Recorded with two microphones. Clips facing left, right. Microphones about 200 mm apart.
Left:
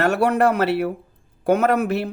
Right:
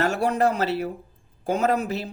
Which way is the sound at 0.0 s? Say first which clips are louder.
Left 4 dB; 65° left (ahead or behind).